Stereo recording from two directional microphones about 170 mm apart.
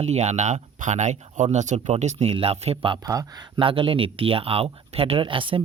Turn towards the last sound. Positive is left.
turn(degrees=-30)  # may be behind; listen again after turning